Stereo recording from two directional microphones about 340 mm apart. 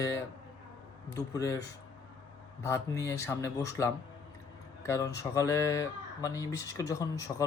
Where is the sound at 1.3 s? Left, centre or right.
Centre.